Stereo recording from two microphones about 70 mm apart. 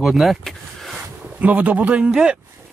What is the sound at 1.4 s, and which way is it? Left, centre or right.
Speech, right.